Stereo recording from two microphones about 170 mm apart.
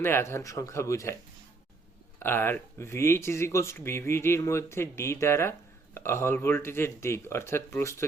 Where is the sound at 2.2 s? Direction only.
15° left (ahead or behind).